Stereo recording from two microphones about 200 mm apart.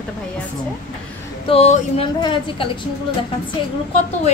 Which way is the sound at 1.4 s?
30° left (ahead or behind).